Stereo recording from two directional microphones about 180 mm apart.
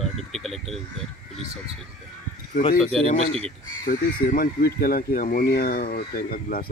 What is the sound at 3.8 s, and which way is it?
Speech, 50° left (ahead or behind).